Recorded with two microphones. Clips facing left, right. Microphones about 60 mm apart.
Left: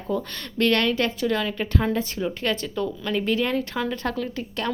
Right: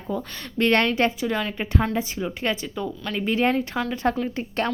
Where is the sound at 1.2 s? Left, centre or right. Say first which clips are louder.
Left 1 dB; centre.